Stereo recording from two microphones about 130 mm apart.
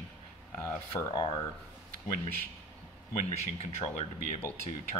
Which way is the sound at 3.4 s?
60° left (ahead or behind).